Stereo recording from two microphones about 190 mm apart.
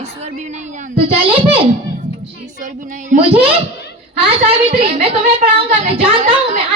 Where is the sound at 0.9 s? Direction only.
30° right (ahead or behind).